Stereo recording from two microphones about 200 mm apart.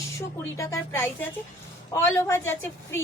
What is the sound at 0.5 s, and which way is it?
Speech, 15° left (ahead or behind).